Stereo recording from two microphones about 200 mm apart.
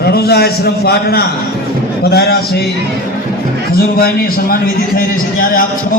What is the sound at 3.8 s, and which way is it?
A man's voice, 50° left (ahead or behind).